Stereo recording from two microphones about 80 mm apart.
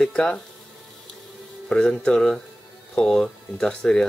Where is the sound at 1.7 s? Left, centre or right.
Centre.